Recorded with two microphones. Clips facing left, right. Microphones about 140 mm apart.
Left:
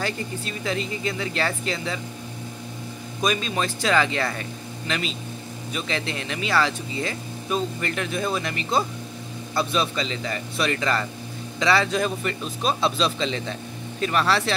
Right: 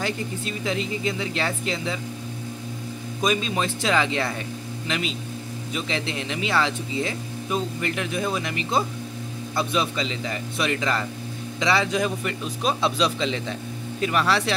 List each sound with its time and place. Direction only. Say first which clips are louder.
0.0 s speech: right 1 dB; 20° right (ahead or behind)
3.2 s speech: right 1 dB; 20° right (ahead or behind)